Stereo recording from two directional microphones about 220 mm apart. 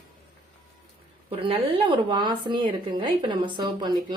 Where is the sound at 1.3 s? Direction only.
25° right (ahead or behind).